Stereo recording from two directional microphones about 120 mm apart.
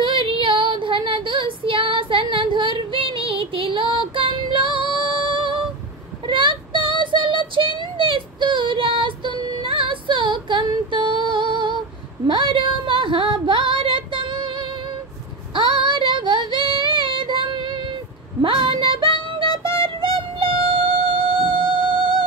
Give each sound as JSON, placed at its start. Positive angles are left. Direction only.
{"t": 0.0, "sound": "female singing", "side_deg": -45}
{"t": 6.2, "sound": "child singing", "side_deg": -45}
{"t": 12.3, "sound": "female singing", "side_deg": -45}
{"t": 18.4, "sound": "music", "side_deg": -45}